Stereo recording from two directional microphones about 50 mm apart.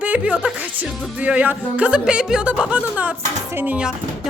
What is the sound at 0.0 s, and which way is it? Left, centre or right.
Music, right.